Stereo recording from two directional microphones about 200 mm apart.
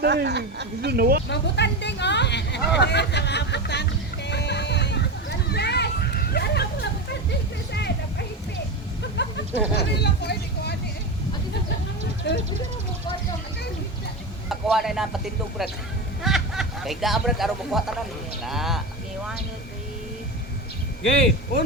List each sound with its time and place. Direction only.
0.0 s speech: 55° right (ahead or behind)
1.3 s hubbub: 60° left (ahead or behind)
7.7 s a sound: 55° left (ahead or behind)
9.1 s speech: 55° left (ahead or behind)
12.2 s speech: 60° left (ahead or behind)
14.5 s speech: centre (ahead or behind)
16.2 s speech: centre (ahead or behind)